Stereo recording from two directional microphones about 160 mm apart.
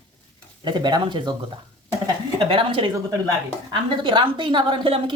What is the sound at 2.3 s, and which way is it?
Speech, 35° right (ahead or behind).